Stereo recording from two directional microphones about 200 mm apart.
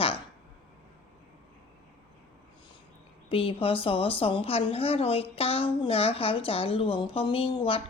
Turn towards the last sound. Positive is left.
turn(degrees=25)  # may be behind; listen again after turning